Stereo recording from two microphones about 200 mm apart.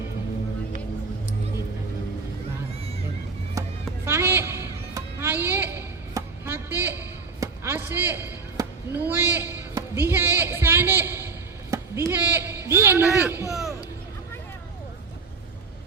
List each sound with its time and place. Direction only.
3.6 s chop: 15° right (ahead or behind)
4.0 s music: 10° right (ahead or behind)
11.7 s a sound: 15° right (ahead or behind)